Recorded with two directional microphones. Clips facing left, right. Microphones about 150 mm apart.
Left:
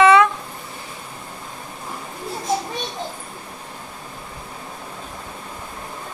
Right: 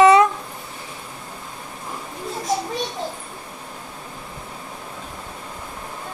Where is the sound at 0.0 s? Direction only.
40° right (ahead or behind).